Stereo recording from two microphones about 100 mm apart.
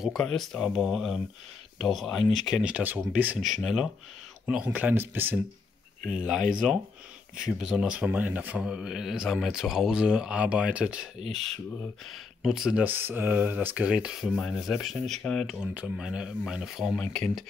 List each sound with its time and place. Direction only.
0.0 s speech: 5° left (ahead or behind)
2.6 s speech: 15° right (ahead or behind)
3.3 s speech: 5° right (ahead or behind)
4.5 s speech: 15° right (ahead or behind)
6.0 s speech: 5° right (ahead or behind)
12.8 s speech: 20° right (ahead or behind); by 15.5 s 5° left (ahead or behind)
15.6 s speech: 10° right (ahead or behind); by 17.5 s 5° left (ahead or behind)